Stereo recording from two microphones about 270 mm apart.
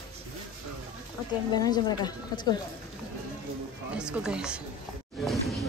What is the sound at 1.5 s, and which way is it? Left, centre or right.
Speech, centre.